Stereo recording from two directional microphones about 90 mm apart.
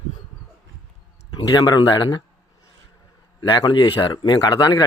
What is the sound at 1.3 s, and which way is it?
Speech, 50° left (ahead or behind).